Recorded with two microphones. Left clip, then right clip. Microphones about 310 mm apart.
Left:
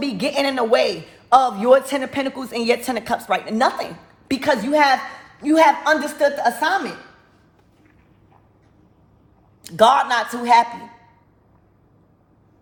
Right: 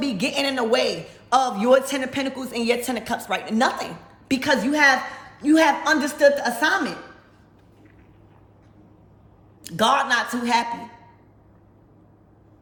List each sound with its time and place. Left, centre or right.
0.0 s a man's voice: centre
9.6 s a man's voice: centre